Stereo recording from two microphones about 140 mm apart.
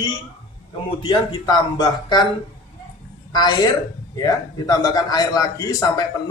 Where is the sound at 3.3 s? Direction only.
30° left (ahead or behind).